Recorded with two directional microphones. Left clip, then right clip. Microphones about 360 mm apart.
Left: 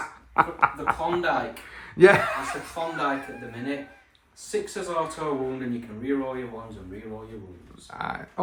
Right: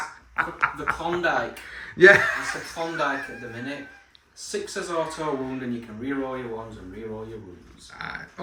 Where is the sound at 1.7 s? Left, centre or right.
Centre.